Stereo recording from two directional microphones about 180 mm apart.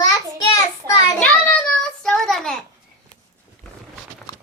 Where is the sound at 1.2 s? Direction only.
5° left (ahead or behind).